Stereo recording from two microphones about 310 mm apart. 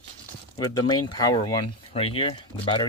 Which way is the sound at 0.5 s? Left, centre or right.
Centre.